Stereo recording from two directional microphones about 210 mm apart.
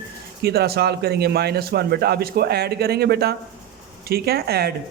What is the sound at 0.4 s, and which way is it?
A man's voice, 50° right (ahead or behind).